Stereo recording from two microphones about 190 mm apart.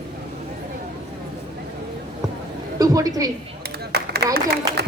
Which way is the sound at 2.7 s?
20° right (ahead or behind).